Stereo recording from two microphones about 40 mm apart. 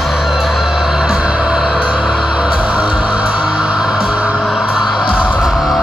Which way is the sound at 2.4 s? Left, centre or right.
Centre.